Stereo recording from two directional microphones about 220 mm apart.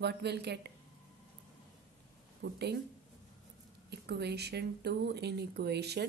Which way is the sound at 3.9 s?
50° right (ahead or behind).